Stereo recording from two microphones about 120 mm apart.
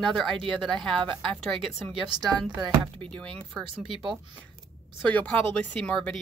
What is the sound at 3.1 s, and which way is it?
Speech, 10° left (ahead or behind).